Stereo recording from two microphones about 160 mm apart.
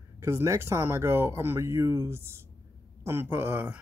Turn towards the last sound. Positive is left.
turn(degrees=-10)  # may be behind; listen again after turning